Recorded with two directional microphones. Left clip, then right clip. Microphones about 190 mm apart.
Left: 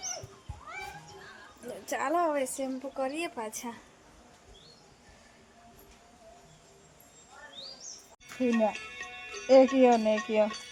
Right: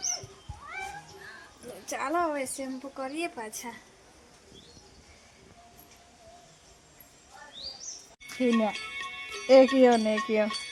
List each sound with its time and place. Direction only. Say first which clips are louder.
1.9 s a woman's voice: left 1 dB; 15° left (ahead or behind)
8.4 s speech: right 1 dB; 65° right (ahead or behind)